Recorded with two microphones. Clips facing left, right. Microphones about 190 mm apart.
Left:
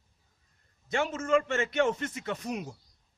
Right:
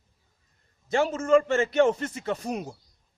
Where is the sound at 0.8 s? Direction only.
35° right (ahead or behind).